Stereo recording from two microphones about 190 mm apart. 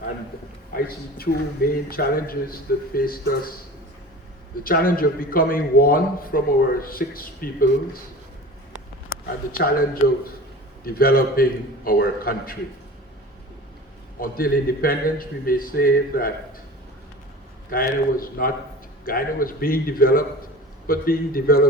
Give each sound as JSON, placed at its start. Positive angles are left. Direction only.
{"t": 1.2, "sound": "a man's voice", "side_deg": 50}
{"t": 4.6, "sound": "a man's voice", "side_deg": 50}
{"t": 9.5, "sound": "a man's voice", "side_deg": 50}
{"t": 14.2, "sound": "a man's voice", "side_deg": 50}
{"t": 17.7, "sound": "a man's voice", "side_deg": 50}